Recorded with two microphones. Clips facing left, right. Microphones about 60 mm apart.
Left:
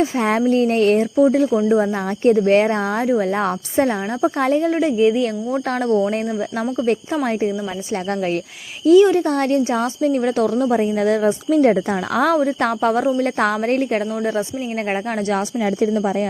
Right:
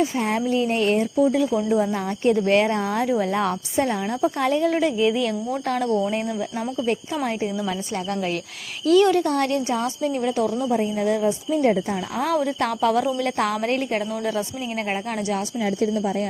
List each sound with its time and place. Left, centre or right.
0.3 s speech: left
4.8 s speech: left
5.2 s speech: left
5.9 s speech: left
6.1 s speech: left
8.9 s speech: centre
9.2 s speech: left
10.3 s speech: left